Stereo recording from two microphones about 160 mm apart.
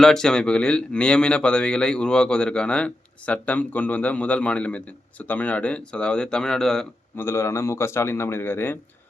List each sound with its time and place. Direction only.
0.0 s speech: 5° left (ahead or behind)
7.2 s speech: 15° left (ahead or behind)